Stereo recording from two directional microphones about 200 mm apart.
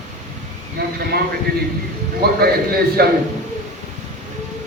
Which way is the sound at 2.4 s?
50° right (ahead or behind).